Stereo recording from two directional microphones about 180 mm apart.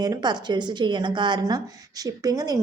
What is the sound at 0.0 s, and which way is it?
A woman's voice, 20° right (ahead or behind).